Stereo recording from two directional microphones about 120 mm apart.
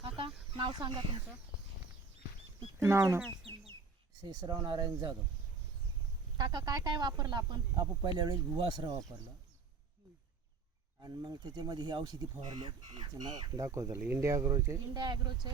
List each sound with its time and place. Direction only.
0.0 s a sound: 45° right (ahead or behind)
0.5 s speech: 40° right (ahead or behind)
2.7 s speech: 25° right (ahead or behind)
4.2 s speech: 35° right (ahead or behind)
6.3 s speech: 35° right (ahead or behind)
11.0 s speech: 35° right (ahead or behind)
13.7 s speech: 25° right (ahead or behind)